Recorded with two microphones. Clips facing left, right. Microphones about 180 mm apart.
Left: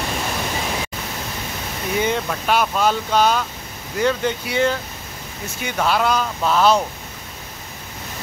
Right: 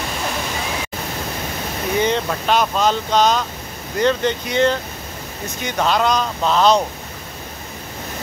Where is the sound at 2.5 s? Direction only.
10° left (ahead or behind).